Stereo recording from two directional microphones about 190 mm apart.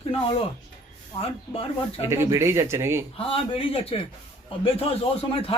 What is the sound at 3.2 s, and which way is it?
Speech, 30° left (ahead or behind).